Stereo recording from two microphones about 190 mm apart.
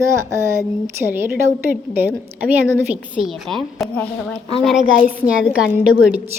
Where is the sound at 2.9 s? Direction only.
5° right (ahead or behind).